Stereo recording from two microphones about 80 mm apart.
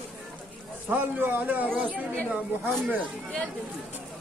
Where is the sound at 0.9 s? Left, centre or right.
Right.